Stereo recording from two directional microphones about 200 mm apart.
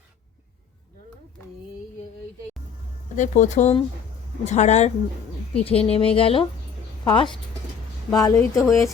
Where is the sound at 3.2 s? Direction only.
40° left (ahead or behind).